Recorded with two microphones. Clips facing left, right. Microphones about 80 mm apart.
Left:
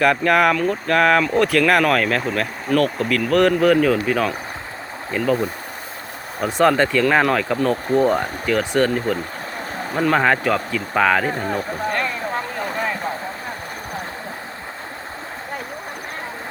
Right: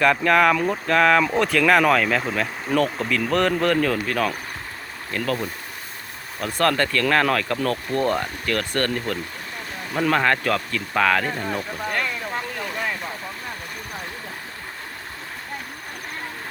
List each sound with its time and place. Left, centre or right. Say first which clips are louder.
0.0 s a man's voice: left 1 dB; centre
6.4 s a man's voice: left 5 dB; centre
12.3 s vehicle: left 4 dB; left